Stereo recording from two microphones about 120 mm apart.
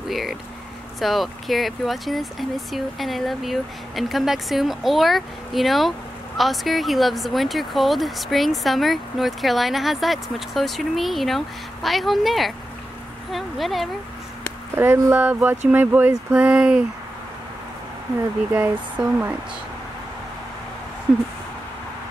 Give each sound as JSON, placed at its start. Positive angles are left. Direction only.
{"t": 0.1, "sound": "speech", "side_deg": 0}
{"t": 14.8, "sound": "speech", "side_deg": -15}
{"t": 18.5, "sound": "speech", "side_deg": -10}